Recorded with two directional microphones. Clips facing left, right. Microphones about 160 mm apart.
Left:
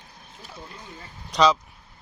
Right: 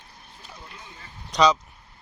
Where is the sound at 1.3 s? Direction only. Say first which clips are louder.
Even; centre (ahead or behind).